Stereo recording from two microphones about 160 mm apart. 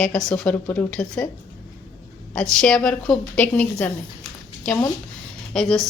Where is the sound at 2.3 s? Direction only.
5° left (ahead or behind).